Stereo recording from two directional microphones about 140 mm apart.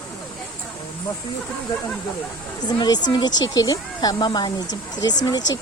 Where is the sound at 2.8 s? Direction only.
30° left (ahead or behind).